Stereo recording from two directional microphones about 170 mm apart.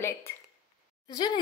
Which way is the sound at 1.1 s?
25° left (ahead or behind).